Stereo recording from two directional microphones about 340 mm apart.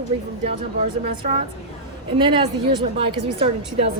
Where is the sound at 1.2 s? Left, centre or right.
Right.